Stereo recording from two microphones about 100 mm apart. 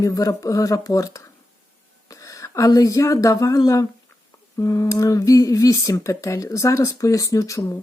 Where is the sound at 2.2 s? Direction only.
35° left (ahead or behind).